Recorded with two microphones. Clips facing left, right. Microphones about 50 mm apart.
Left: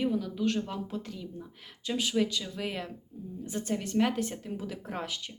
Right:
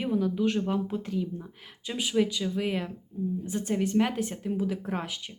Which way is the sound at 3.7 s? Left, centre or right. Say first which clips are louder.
Right 2 dB; centre.